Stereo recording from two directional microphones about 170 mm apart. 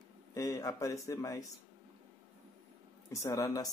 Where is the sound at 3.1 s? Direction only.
15° left (ahead or behind).